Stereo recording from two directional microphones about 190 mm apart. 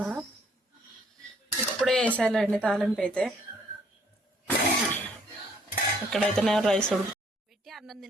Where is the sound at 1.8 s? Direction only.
5° left (ahead or behind).